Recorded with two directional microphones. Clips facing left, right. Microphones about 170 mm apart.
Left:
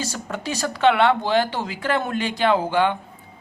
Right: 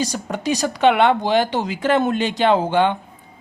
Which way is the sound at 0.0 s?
15° right (ahead or behind).